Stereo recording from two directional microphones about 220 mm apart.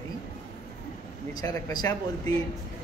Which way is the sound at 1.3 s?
15° left (ahead or behind).